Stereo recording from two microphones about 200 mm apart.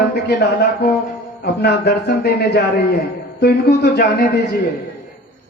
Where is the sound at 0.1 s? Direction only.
55° left (ahead or behind).